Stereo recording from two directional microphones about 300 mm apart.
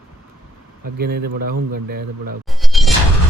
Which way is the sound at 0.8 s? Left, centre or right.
Right.